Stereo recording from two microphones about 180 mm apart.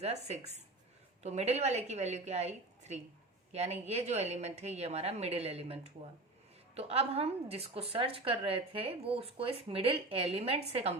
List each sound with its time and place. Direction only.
0.0 s a woman's voice: 35° right (ahead or behind)